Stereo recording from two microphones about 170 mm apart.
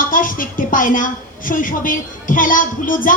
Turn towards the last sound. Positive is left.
turn(degrees=55)  # may be behind; listen again after turning